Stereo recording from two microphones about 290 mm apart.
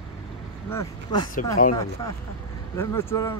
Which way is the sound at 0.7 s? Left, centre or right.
Centre.